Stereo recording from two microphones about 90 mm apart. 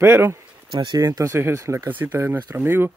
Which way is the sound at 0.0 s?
25° right (ahead or behind).